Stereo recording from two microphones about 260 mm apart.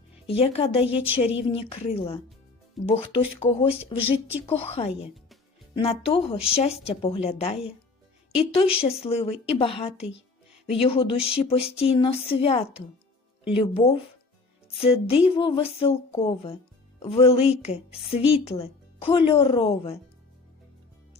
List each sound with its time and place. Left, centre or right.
0.3 s speech: left
0.9 s a woman's voice: centre
1.4 s speech: left
8.8 s speech: left